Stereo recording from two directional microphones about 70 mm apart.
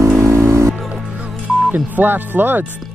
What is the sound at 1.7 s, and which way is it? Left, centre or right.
Speech, right.